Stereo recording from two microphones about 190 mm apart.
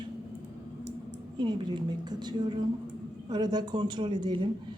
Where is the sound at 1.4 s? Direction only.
25° right (ahead or behind).